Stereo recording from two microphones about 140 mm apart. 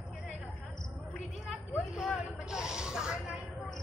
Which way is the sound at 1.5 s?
Centre (ahead or behind).